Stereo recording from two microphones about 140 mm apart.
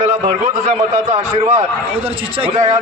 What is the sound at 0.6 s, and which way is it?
A man's voice, 45° right (ahead or behind).